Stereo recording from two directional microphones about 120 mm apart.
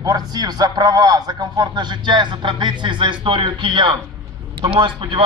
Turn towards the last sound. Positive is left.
turn(degrees=-45)  # may be behind; listen again after turning